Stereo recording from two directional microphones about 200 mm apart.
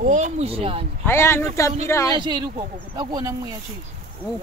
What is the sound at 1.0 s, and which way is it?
Speech, 10° left (ahead or behind).